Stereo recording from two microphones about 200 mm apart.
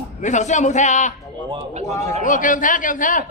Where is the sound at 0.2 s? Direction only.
35° left (ahead or behind).